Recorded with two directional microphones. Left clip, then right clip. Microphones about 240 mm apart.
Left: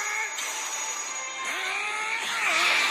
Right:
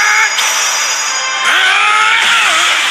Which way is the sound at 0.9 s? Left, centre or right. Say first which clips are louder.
Right 19 dB; right.